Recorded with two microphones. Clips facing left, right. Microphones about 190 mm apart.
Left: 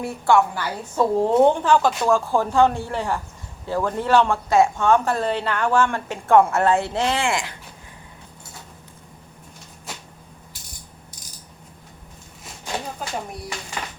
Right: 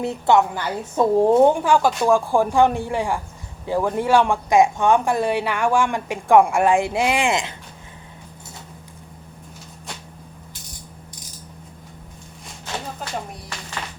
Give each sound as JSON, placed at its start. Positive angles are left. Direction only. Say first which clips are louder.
{"t": 0.0, "sound": "a woman's voice", "louder": "right 1 dB", "side_deg": -20}